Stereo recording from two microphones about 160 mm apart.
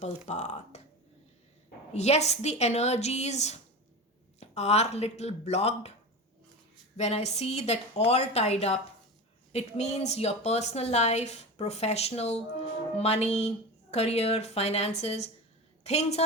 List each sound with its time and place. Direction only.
0.3 s a woman's voice: 45° left (ahead or behind)
1.9 s a woman's voice: 45° left (ahead or behind)
6.9 s a woman's voice: 45° left (ahead or behind)